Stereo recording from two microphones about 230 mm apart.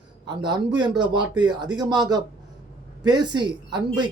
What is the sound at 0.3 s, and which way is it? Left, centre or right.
Speech, centre.